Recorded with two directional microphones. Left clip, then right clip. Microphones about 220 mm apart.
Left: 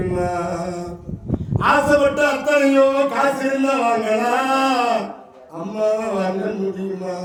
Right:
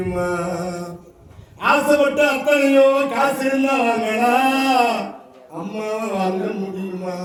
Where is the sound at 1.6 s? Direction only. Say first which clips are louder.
Even; 20° right (ahead or behind).